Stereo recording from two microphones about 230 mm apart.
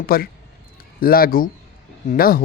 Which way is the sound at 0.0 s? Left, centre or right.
Left.